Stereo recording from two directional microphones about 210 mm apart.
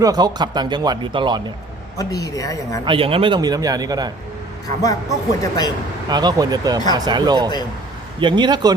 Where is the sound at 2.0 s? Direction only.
15° left (ahead or behind).